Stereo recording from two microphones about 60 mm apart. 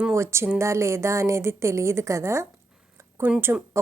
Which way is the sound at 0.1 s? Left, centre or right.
Right.